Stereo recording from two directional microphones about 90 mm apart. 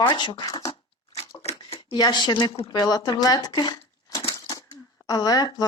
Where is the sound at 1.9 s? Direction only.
55° left (ahead or behind).